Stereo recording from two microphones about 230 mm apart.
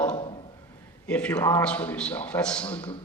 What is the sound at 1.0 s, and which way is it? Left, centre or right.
A man's voice, centre.